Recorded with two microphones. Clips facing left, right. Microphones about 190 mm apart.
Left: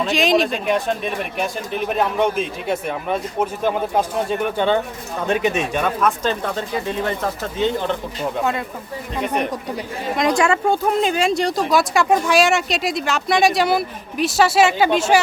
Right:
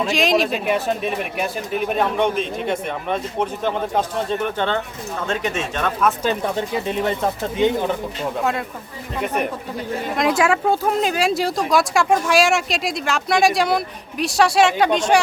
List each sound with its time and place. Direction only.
0.0 s speech: centre (ahead or behind)
6.0 s speech: 5° right (ahead or behind)
6.4 s speech: 15° right (ahead or behind)
9.2 s speech: 5° right (ahead or behind)